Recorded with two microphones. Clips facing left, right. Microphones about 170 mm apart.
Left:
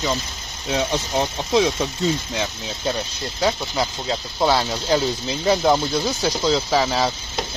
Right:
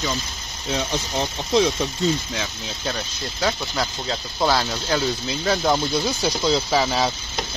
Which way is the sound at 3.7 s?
15° left (ahead or behind).